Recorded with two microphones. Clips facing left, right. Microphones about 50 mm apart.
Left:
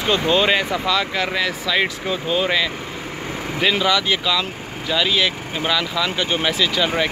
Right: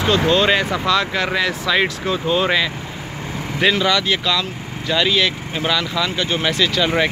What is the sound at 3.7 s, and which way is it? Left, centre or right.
Speech, centre.